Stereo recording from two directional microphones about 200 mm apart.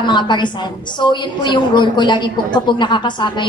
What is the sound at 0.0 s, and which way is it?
A woman's voice, 20° left (ahead or behind).